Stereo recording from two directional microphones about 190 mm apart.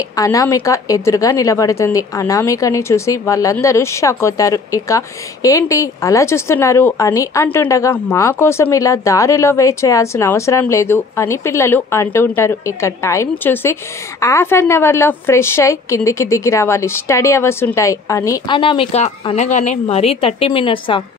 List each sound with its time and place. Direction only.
0.1 s a woman's voice: 20° left (ahead or behind)
18.6 s a woman's voice: 30° left (ahead or behind)